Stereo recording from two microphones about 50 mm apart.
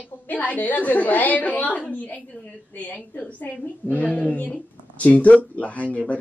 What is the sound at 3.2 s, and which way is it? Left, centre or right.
Speech, left.